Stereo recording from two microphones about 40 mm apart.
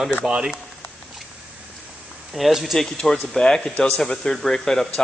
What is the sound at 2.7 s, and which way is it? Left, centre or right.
Speech, centre.